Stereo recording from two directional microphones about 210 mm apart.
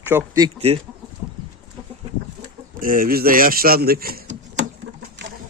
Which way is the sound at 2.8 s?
40° right (ahead or behind).